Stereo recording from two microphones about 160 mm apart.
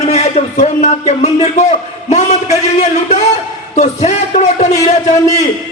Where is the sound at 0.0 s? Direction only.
45° left (ahead or behind).